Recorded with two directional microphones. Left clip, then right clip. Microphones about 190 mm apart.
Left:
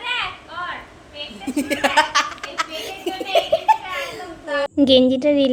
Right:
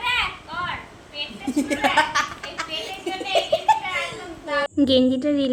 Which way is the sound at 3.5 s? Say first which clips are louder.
Left 2 dB; 10° left (ahead or behind).